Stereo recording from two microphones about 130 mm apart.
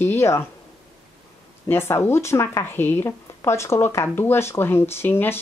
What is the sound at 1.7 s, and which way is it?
Speech, 20° left (ahead or behind).